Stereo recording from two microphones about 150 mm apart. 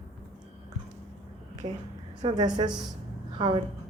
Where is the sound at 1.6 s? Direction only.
30° right (ahead or behind).